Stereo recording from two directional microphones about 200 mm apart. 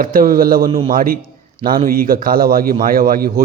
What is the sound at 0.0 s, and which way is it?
A man's voice, 45° right (ahead or behind).